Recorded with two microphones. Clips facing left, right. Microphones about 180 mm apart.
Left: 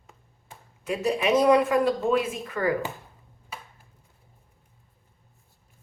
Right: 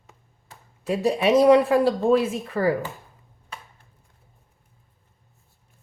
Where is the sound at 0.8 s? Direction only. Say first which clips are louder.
Right 4 dB; 35° right (ahead or behind).